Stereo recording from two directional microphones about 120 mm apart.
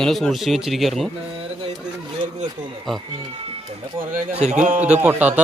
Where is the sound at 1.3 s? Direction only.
50° right (ahead or behind).